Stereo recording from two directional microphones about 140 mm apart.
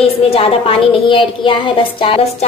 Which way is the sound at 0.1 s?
45° left (ahead or behind).